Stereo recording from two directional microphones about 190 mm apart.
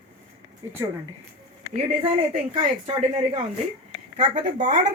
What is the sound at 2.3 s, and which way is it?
Speech, 35° right (ahead or behind).